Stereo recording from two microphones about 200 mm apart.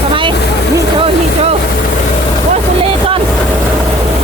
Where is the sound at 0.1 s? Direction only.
25° right (ahead or behind).